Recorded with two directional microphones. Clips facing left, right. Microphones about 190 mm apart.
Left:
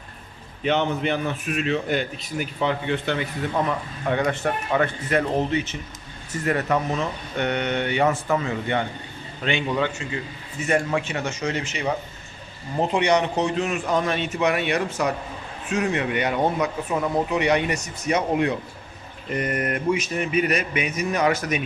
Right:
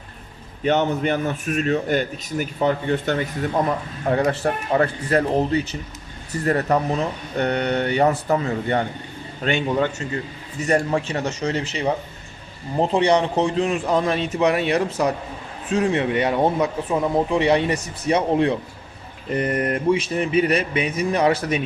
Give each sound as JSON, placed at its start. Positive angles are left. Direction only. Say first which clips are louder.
{"t": 0.6, "sound": "a man's voice", "louder": "right 3 dB", "side_deg": -45}
{"t": 12.9, "sound": "speech", "louder": "right 2 dB", "side_deg": -30}